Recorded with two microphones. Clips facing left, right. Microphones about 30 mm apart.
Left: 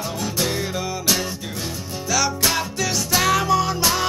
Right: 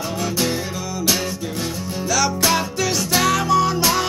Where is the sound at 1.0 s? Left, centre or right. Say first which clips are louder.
Right 4 dB; centre.